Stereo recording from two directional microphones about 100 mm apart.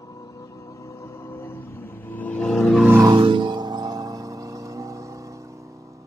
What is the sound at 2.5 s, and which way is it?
Music, 5° left (ahead or behind).